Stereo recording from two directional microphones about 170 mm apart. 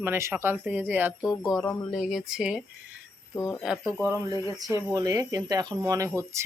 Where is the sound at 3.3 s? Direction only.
15° left (ahead or behind).